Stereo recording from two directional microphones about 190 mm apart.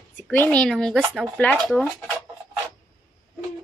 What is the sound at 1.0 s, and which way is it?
Speech, 10° right (ahead or behind).